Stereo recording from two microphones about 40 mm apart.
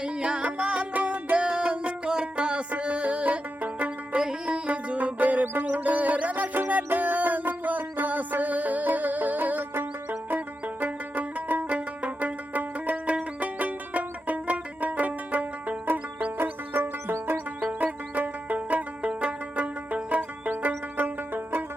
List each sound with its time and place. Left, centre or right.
0.0 s music: right
4.2 s music: right
4.6 s music: right
16.4 s music: right
17.3 s music: right